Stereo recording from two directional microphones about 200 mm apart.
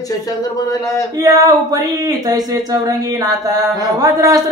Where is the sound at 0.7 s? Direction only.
15° left (ahead or behind).